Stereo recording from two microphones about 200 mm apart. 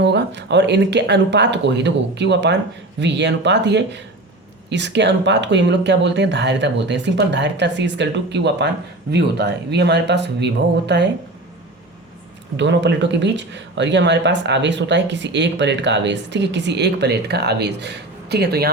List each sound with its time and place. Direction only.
0.0 s speech: 60° right (ahead or behind)
12.5 s speech: 60° right (ahead or behind)